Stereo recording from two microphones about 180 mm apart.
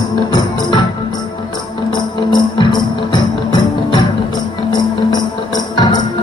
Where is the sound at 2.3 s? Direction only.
25° left (ahead or behind).